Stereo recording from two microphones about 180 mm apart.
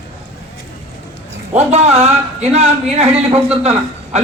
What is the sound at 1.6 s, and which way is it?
A man's voice, 35° right (ahead or behind).